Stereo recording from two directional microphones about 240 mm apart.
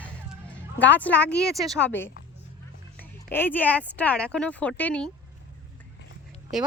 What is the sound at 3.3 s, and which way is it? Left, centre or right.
Speech, centre.